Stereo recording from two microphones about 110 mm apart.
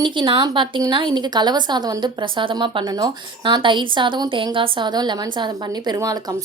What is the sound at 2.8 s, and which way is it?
A woman's voice, 40° right (ahead or behind).